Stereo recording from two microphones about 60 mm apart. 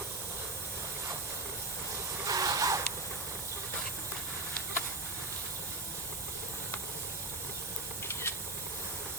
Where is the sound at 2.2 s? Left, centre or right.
Right.